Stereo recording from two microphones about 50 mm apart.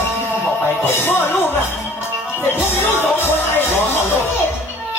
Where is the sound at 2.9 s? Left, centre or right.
Left.